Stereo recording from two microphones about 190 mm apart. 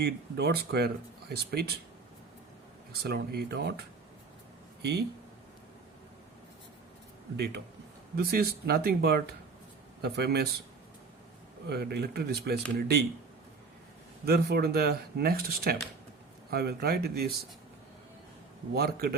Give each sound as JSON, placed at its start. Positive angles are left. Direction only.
{"t": 0.0, "sound": "speech", "side_deg": -60}
{"t": 3.0, "sound": "speech", "side_deg": -55}
{"t": 7.3, "sound": "speech", "side_deg": -60}
{"t": 11.7, "sound": "speech", "side_deg": -60}
{"t": 14.3, "sound": "speech", "side_deg": -55}
{"t": 18.7, "sound": "speech", "side_deg": -55}